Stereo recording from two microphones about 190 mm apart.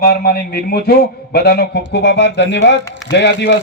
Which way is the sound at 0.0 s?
50° left (ahead or behind).